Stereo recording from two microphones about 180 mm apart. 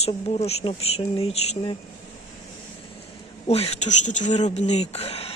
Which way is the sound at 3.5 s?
35° left (ahead or behind).